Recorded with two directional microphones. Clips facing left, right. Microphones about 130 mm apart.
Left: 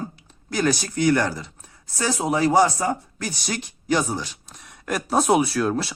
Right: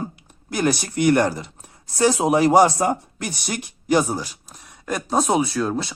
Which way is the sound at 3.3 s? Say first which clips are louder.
Right 1 dB; 55° right (ahead or behind).